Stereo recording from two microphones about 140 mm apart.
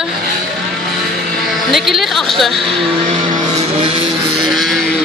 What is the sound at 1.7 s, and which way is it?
Speech, centre (ahead or behind).